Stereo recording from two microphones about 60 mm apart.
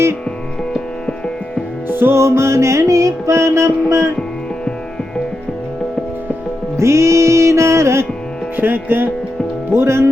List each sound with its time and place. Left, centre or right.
1.9 s music: right
6.7 s music: right
8.5 s music: right
9.7 s speech: right